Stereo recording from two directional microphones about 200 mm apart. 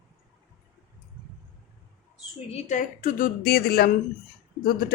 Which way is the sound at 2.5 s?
40° left (ahead or behind).